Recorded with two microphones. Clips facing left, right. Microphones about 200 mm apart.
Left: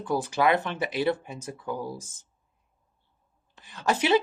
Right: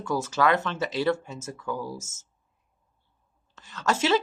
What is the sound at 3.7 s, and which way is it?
Speech, 15° left (ahead or behind).